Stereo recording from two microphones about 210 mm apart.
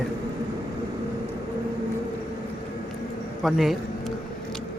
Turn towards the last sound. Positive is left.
turn(degrees=0)  # may be behind; listen again after turning